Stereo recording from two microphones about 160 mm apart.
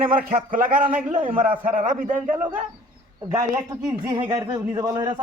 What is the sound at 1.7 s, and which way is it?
Speech, 55° right (ahead or behind).